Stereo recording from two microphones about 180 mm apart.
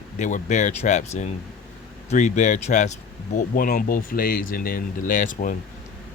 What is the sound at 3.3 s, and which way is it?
Speech, 55° left (ahead or behind).